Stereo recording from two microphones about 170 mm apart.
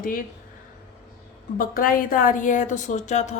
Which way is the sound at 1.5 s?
55° left (ahead or behind).